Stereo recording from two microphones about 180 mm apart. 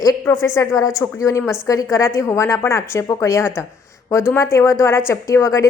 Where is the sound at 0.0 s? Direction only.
20° left (ahead or behind).